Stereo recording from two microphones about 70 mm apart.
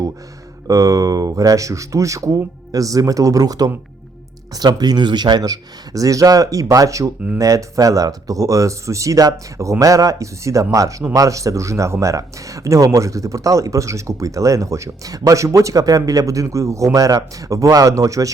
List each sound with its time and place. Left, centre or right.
0.7 s speech: right
4.5 s speech: right